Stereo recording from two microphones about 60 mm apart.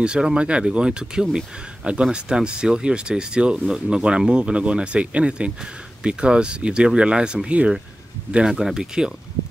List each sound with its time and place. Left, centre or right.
0.0 s speech: centre